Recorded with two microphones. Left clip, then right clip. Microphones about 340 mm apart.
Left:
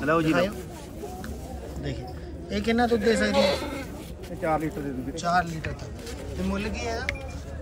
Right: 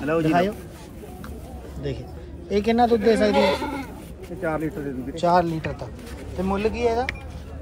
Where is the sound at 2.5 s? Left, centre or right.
Centre.